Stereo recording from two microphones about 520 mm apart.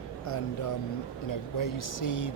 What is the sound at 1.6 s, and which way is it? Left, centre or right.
Speech, left.